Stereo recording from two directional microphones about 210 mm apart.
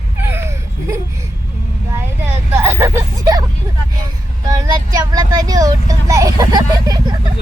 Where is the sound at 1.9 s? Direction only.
10° right (ahead or behind).